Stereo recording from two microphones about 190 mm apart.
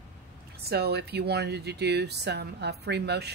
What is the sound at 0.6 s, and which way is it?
Speech, 60° right (ahead or behind).